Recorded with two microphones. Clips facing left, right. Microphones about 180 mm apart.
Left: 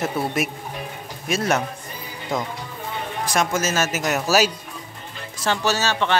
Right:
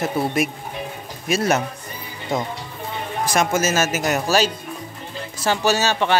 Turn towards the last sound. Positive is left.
turn(degrees=-15)  # may be behind; listen again after turning